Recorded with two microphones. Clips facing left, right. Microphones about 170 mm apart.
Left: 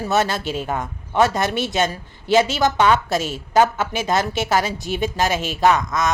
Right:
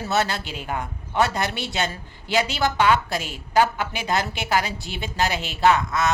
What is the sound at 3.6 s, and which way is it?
A woman's voice, 20° left (ahead or behind).